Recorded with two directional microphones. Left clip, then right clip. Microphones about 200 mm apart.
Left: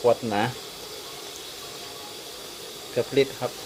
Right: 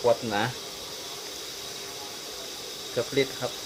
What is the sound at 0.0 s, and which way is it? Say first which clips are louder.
Speech: left 2 dB; 25° left (ahead or behind).